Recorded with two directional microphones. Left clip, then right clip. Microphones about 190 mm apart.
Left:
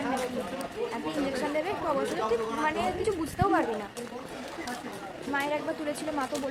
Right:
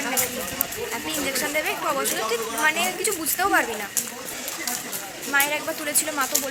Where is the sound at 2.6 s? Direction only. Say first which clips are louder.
Right 8 dB; 15° left (ahead or behind).